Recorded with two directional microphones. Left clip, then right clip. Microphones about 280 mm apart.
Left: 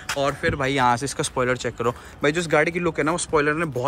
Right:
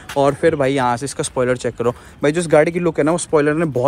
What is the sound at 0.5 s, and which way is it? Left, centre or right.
Speech, centre.